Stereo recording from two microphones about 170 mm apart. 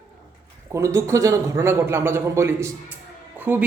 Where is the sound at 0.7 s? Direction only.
15° right (ahead or behind).